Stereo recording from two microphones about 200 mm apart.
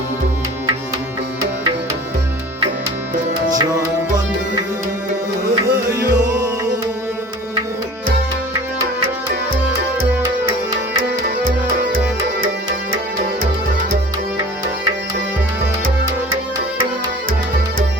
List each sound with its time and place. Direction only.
5.9 s music: 15° right (ahead or behind)
10.4 s music: 25° right (ahead or behind)